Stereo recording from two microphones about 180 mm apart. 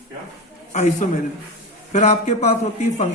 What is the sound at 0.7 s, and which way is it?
A man's voice, 40° left (ahead or behind).